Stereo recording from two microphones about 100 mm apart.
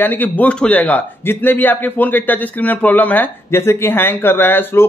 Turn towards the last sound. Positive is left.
turn(degrees=20)  # may be behind; listen again after turning